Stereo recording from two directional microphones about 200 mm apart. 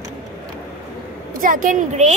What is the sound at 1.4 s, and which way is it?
Speech, 40° right (ahead or behind).